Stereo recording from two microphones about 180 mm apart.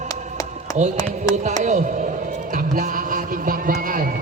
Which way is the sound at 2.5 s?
45° right (ahead or behind).